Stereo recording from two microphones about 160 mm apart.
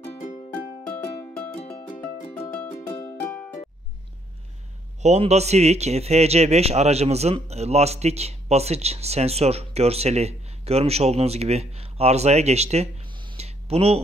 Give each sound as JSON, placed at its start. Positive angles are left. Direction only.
{"t": 0.8, "sound": "music", "side_deg": 10}
{"t": 5.0, "sound": "speech", "side_deg": -45}